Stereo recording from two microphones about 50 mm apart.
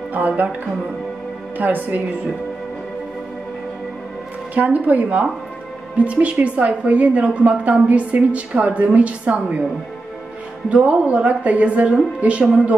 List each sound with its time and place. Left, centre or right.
0.1 s speech: right
1.6 s a woman's voice: right
4.6 s a woman's voice: right
10.7 s a woman's voice: right